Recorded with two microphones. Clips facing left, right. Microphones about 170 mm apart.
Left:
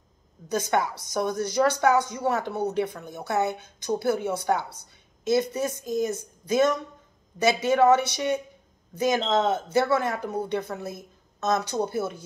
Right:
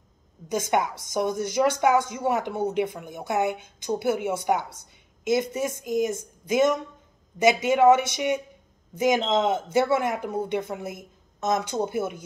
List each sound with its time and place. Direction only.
0.5 s speech: 20° right (ahead or behind)